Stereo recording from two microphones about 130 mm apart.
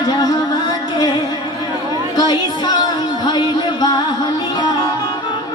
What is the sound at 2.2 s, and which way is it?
Music, 30° left (ahead or behind).